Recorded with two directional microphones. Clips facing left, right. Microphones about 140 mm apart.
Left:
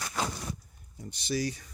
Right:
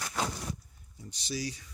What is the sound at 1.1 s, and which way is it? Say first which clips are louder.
Speech: left 5 dB; 55° left (ahead or behind).